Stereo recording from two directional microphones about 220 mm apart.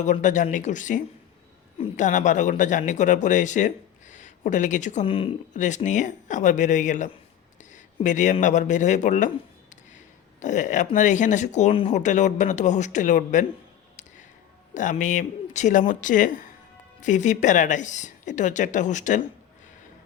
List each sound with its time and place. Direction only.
0.0 s speech: 35° left (ahead or behind)
10.4 s speech: 35° left (ahead or behind)
14.7 s speech: 35° left (ahead or behind)